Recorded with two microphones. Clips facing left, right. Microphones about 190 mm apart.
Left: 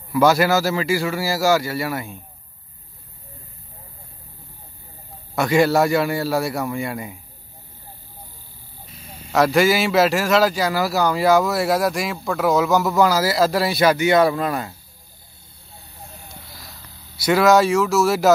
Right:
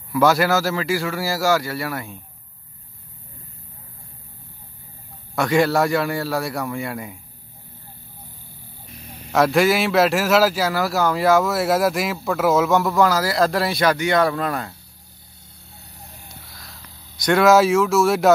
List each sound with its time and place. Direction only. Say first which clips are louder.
0.1 s a man's voice: left 1 dB; centre (ahead or behind)
5.3 s a man's voice: left 1 dB; 5° left (ahead or behind)
8.9 s vehicle: right 1 dB; 65° right (ahead or behind)
9.3 s a man's voice: even; centre (ahead or behind)
16.5 s speech: left 1 dB; centre (ahead or behind)